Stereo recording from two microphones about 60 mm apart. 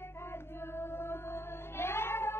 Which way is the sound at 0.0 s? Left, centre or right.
Left.